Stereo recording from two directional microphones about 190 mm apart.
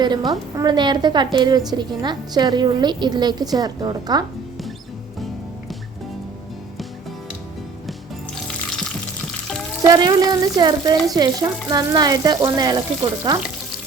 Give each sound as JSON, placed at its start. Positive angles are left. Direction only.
{"t": 0.0, "sound": "a woman's voice", "side_deg": -20}
{"t": 9.8, "sound": "a woman's voice", "side_deg": -20}